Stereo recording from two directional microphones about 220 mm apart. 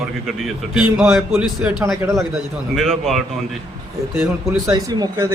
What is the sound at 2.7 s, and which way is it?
A man's voice, centre (ahead or behind).